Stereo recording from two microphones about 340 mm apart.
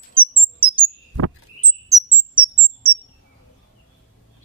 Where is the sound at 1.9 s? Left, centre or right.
Centre.